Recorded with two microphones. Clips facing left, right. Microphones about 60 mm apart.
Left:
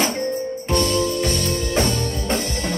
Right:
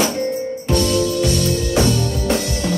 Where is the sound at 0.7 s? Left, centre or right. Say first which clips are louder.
Right 2 dB; left.